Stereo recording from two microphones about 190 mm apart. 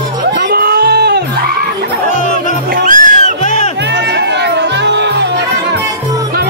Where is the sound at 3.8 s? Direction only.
65° right (ahead or behind).